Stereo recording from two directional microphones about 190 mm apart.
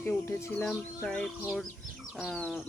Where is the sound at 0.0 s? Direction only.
15° left (ahead or behind).